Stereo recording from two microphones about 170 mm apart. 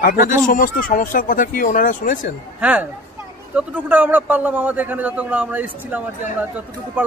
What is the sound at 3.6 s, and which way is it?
A man's voice, 10° right (ahead or behind).